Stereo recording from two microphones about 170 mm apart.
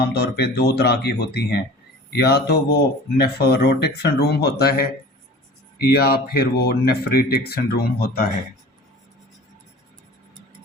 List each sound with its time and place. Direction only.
0.0 s speech: 70° left (ahead or behind)